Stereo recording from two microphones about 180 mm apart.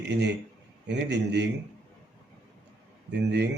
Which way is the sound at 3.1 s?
70° right (ahead or behind).